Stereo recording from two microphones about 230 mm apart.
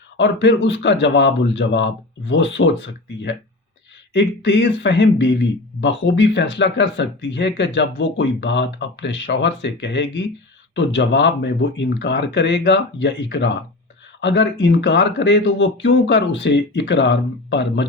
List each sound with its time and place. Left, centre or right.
0.2 s speech: left